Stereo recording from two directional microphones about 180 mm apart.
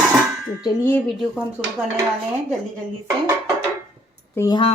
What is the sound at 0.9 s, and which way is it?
Speech, 5° left (ahead or behind).